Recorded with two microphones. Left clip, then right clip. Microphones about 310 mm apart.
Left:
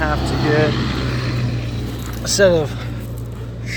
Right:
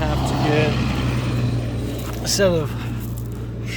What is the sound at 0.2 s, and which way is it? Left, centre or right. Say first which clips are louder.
Vehicle: left 3 dB; right.